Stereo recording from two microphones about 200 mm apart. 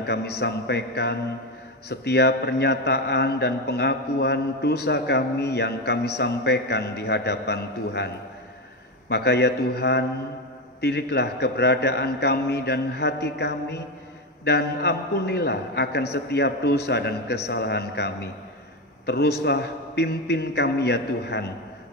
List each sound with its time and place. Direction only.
0.0 s a man's voice: 55° left (ahead or behind)
9.1 s a man's voice: 55° left (ahead or behind)